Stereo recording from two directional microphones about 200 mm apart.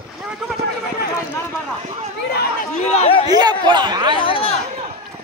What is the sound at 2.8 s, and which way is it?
Speech, 30° left (ahead or behind).